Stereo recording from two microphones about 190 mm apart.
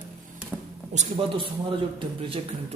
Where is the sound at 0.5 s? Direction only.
10° right (ahead or behind).